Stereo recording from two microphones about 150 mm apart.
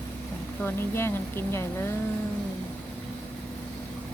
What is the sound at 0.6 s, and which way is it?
Speech, 15° left (ahead or behind).